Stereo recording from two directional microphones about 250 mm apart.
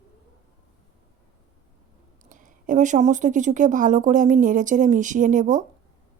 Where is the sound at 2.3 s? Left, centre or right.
Right.